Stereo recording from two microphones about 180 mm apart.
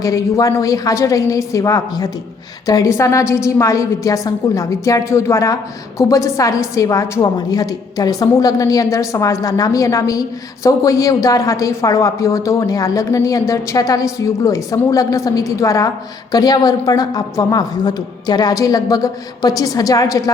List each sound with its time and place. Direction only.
0.0 s a woman's voice: 20° left (ahead or behind)